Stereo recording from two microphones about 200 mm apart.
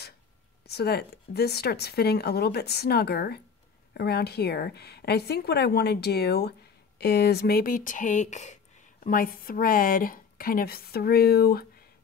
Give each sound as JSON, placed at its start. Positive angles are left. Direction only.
{"t": 0.7, "sound": "speech", "side_deg": 55}